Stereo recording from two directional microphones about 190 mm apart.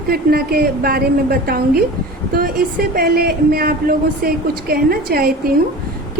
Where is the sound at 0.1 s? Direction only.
50° right (ahead or behind).